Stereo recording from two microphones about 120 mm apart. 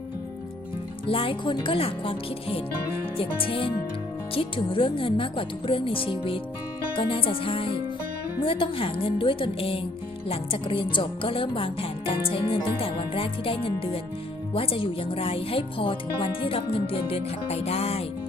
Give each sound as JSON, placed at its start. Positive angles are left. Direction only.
{"t": 1.0, "sound": "speech", "side_deg": 50}